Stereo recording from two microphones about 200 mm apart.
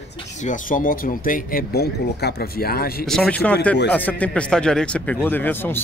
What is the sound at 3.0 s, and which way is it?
Speech, centre (ahead or behind).